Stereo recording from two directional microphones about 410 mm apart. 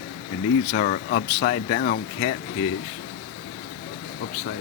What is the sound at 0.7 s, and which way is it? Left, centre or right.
Speech, left.